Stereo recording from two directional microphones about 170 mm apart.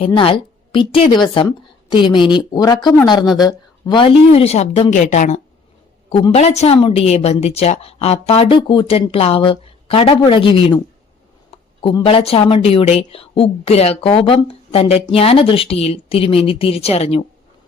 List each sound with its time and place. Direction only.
0.0 s a woman's voice: 30° left (ahead or behind)